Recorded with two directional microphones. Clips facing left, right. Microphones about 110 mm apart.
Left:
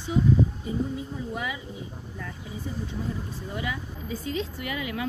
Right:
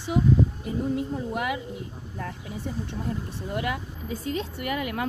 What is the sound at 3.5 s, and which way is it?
Speech, 55° right (ahead or behind).